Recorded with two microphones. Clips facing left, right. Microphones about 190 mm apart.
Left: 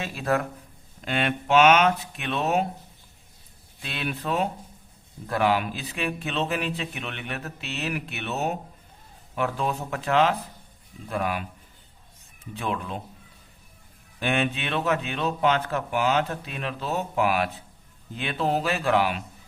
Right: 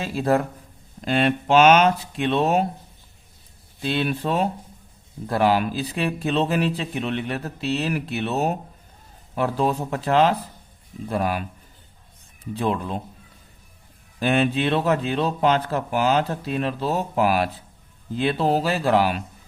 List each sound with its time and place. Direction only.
0.0 s speech: 35° right (ahead or behind)
3.8 s speech: 35° right (ahead or behind)
12.5 s speech: 35° right (ahead or behind)
14.2 s speech: 35° right (ahead or behind)